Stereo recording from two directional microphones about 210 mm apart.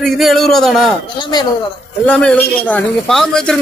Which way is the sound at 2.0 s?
5° left (ahead or behind).